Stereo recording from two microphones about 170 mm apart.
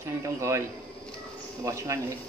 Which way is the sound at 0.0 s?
15° right (ahead or behind).